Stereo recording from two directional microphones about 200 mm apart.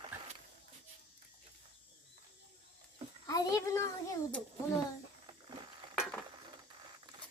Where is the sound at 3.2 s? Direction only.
15° left (ahead or behind).